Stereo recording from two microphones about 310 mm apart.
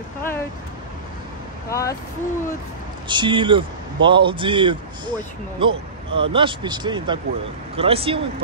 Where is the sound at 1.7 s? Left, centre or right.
Centre.